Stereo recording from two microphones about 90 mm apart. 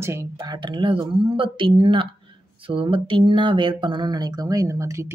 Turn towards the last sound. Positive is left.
turn(degrees=-35)  # may be behind; listen again after turning